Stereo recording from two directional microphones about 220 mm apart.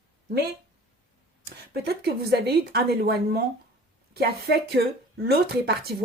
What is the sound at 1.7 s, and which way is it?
Speech, 45° right (ahead or behind).